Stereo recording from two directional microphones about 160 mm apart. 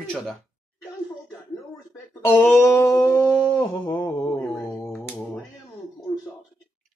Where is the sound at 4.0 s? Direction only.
20° left (ahead or behind).